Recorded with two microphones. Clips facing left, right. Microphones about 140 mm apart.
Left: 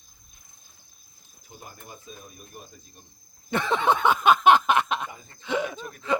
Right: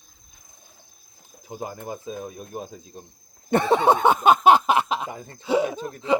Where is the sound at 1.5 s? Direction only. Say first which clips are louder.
Right 12 dB; 90° right.